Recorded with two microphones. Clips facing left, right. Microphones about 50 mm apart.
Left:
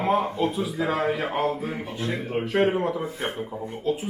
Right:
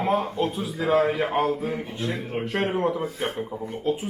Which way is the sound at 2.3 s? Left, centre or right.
Centre.